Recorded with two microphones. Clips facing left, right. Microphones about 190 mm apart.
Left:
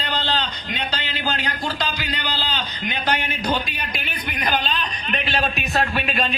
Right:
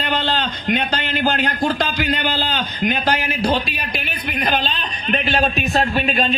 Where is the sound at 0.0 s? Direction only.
50° right (ahead or behind).